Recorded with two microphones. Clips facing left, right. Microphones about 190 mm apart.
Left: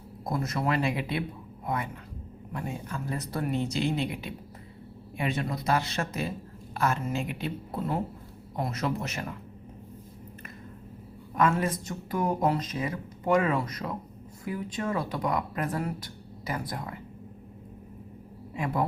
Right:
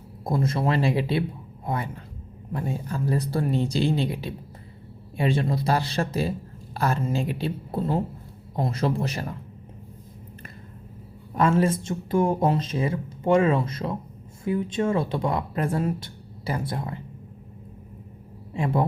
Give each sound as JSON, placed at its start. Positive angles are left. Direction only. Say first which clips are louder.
{"t": 0.3, "sound": "speech", "louder": "right 4 dB", "side_deg": -30}
{"t": 11.3, "sound": "speech", "louder": "right 4 dB", "side_deg": -30}
{"t": 18.5, "sound": "speech", "louder": "right 4 dB", "side_deg": -25}